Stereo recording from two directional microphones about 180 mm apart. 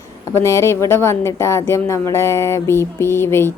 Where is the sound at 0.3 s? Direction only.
15° left (ahead or behind).